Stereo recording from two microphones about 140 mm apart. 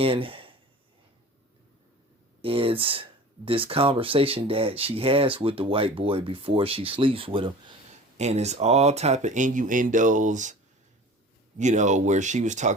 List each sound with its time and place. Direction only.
0.0 s speech: 40° right (ahead or behind)
2.4 s speech: 40° right (ahead or behind)
8.2 s speech: 50° right (ahead or behind)